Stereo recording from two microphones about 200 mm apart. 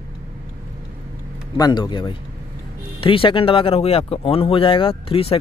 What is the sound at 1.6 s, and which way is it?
Speech, 20° left (ahead or behind).